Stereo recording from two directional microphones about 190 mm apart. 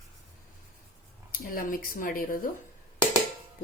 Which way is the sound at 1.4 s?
50° left (ahead or behind).